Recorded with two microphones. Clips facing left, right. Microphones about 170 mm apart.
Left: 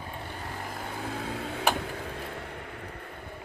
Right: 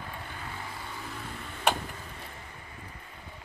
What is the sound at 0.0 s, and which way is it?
Vehicle, 25° left (ahead or behind).